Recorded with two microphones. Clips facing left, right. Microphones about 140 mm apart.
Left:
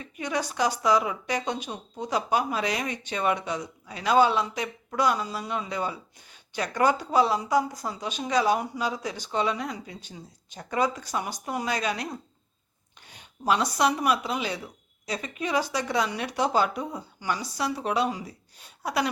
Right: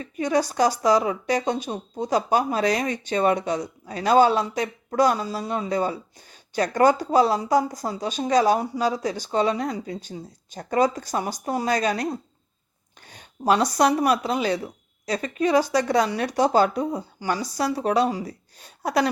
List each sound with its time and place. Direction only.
0.0 s speech: 35° right (ahead or behind)
13.1 s speech: 40° right (ahead or behind)